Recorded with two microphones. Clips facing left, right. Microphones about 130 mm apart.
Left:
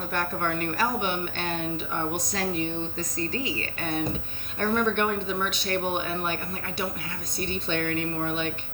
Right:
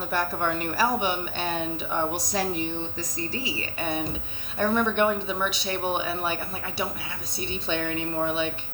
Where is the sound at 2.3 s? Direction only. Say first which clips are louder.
Right 1 dB; 15° right (ahead or behind).